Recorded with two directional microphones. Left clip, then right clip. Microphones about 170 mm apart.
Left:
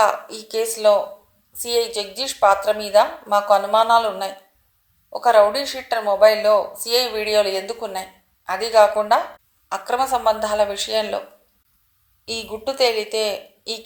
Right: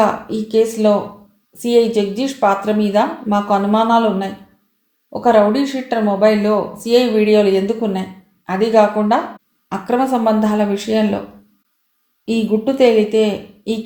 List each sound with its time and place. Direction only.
0.0 s speech: 25° left (ahead or behind)
12.2 s speech: 20° left (ahead or behind)